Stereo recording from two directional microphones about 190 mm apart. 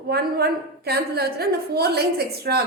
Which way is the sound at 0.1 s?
55° right (ahead or behind).